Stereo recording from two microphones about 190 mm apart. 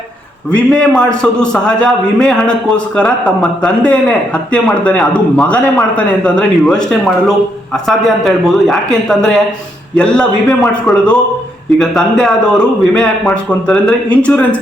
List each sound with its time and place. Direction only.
0.5 s a man's voice: 5° left (ahead or behind)
7.9 s a man's voice: centre (ahead or behind)